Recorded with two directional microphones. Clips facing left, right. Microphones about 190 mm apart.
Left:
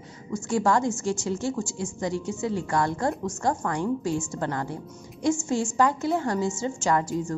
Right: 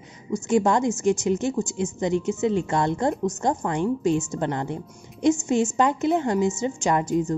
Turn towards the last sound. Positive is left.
turn(degrees=-20)  # may be behind; listen again after turning